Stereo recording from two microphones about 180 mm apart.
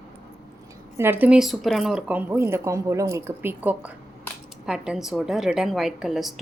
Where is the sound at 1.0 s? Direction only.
10° right (ahead or behind).